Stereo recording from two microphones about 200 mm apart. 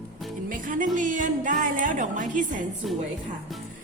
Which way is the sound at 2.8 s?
Centre (ahead or behind).